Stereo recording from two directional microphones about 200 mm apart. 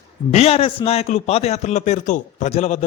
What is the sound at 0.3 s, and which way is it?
A man's voice, 30° left (ahead or behind).